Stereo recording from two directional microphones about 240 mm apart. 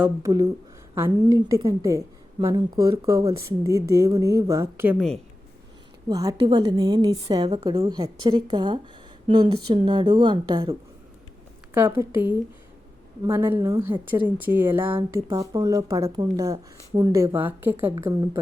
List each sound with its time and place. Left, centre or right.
0.0 s a woman's voice: centre
6.1 s a woman's voice: centre